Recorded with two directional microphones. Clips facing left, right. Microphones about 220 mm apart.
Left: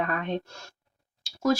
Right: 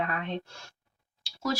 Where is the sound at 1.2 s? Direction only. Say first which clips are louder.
Left 7 dB; 45° left (ahead or behind).